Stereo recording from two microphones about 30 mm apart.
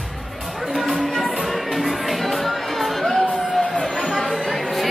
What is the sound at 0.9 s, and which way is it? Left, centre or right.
Music, centre.